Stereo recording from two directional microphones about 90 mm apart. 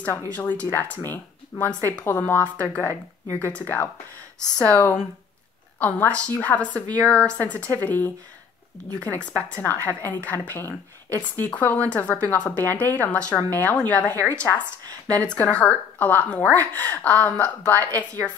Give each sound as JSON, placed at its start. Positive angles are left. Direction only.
{"t": 0.0, "sound": "speech", "side_deg": 20}